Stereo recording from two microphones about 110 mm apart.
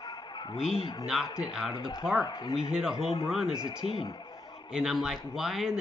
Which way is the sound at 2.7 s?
5° right (ahead or behind).